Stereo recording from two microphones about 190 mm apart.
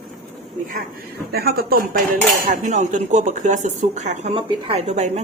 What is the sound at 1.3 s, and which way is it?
Speech, 55° right (ahead or behind).